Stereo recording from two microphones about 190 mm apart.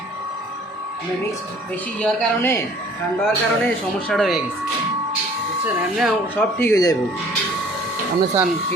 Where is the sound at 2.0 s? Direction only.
10° left (ahead or behind).